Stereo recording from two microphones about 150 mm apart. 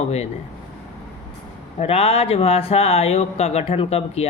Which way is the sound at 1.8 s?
40° left (ahead or behind).